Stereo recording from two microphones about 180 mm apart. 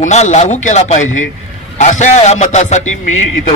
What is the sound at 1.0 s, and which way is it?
Speech, 90° left.